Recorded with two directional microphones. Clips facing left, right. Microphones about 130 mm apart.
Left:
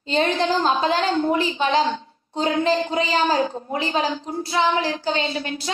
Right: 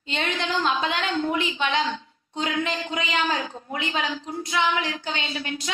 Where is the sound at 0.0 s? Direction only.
35° left (ahead or behind).